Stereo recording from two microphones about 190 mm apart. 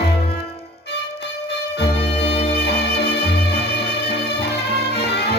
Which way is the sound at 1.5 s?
60° left (ahead or behind).